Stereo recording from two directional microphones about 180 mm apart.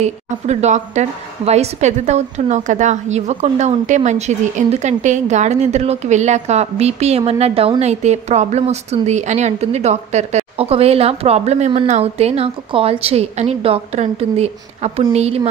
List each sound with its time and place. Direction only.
0.0 s a woman's voice: 40° right (ahead or behind)